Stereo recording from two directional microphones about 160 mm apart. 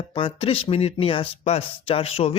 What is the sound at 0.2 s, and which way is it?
Speech, 35° left (ahead or behind).